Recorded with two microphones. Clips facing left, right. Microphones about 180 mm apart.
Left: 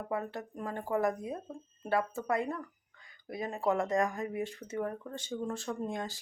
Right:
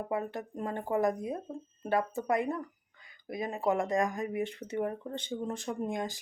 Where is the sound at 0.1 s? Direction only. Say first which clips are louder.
Left 1 dB; 15° right (ahead or behind).